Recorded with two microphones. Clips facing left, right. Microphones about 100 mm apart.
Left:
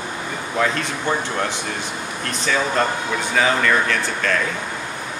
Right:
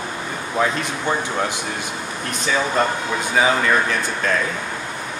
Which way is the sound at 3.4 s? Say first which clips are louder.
Right 1 dB; 15° right (ahead or behind).